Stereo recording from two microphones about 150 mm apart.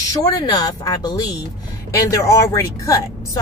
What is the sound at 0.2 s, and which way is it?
A woman's voice, 25° left (ahead or behind).